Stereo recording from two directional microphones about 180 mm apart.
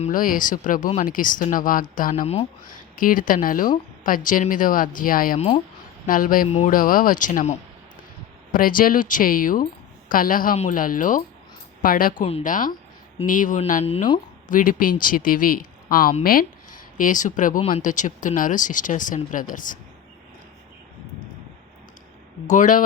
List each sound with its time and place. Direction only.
0.0 s speech: 50° left (ahead or behind)
2.2 s speech: 35° left (ahead or behind)
2.9 s speech: 50° left (ahead or behind)
12.2 s speech: 40° left (ahead or behind)
22.4 s speech: 45° left (ahead or behind)